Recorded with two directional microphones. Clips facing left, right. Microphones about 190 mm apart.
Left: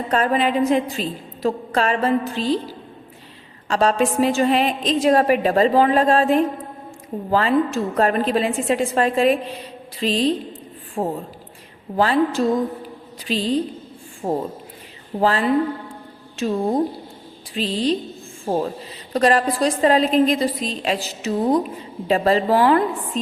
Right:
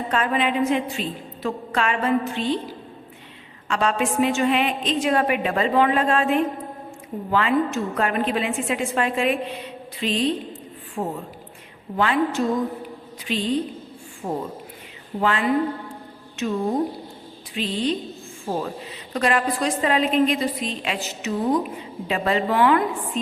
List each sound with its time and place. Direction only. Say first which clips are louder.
0.1 s a woman's voice: left 4 dB; 40° left (ahead or behind)
3.7 s a woman's voice: left 4 dB; 35° left (ahead or behind)